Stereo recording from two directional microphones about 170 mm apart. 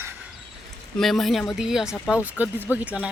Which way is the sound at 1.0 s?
Centre (ahead or behind).